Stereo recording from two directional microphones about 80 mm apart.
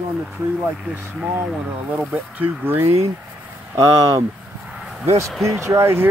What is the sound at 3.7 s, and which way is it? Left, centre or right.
Speech, right.